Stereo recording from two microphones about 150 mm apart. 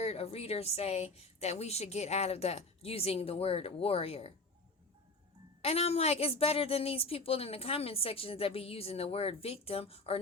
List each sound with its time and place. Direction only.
0.0 s a woman's voice: 45° left (ahead or behind)
5.6 s a woman's voice: 45° left (ahead or behind)